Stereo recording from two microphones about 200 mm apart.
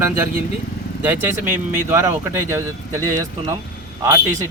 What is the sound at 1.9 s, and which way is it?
Speech, 15° right (ahead or behind).